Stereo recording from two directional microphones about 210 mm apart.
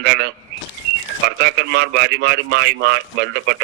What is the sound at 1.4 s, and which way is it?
A man's voice, 50° right (ahead or behind).